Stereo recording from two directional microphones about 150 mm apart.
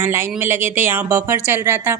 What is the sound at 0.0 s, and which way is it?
A woman's voice, 15° right (ahead or behind).